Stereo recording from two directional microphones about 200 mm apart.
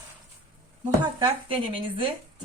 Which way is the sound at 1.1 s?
25° right (ahead or behind).